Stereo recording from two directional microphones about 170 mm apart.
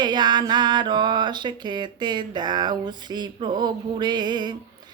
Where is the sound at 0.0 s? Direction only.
25° right (ahead or behind).